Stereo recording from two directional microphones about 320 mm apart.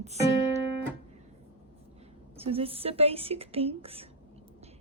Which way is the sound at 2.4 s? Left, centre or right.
Centre.